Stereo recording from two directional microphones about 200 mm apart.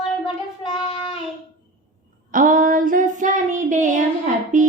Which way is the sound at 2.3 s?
40° right (ahead or behind).